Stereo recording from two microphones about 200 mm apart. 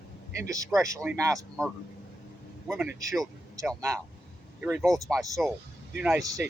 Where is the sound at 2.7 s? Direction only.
10° right (ahead or behind).